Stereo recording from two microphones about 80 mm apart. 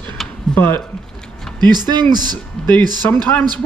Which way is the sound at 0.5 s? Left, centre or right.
Left.